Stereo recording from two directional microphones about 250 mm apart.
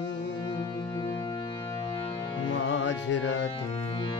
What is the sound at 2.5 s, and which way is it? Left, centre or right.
Music, left.